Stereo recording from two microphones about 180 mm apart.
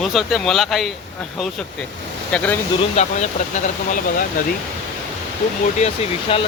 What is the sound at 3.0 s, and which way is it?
Speech, 35° left (ahead or behind).